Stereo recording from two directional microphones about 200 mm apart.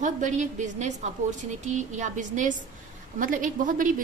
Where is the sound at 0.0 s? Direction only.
40° right (ahead or behind).